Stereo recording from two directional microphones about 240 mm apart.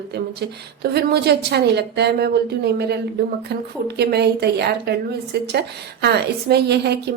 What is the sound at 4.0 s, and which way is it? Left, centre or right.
A woman's voice, right.